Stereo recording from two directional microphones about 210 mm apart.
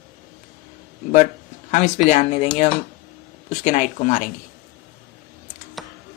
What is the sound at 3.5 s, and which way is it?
Speech, 35° left (ahead or behind).